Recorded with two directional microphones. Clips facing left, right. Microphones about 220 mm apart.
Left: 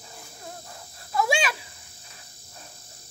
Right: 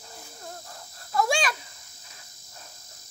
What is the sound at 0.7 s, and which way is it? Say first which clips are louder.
Dog: even; 5° left (ahead or behind).